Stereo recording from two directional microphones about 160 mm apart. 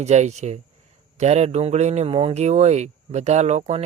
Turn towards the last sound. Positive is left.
turn(degrees=-45)  # may be behind; listen again after turning